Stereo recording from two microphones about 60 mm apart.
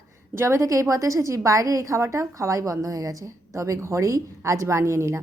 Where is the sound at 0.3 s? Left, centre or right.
Right.